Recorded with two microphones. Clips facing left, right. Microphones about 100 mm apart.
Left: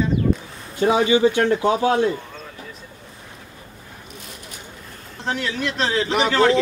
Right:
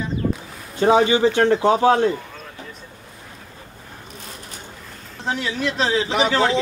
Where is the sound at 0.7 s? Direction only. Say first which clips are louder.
Right 1 dB; 35° right (ahead or behind).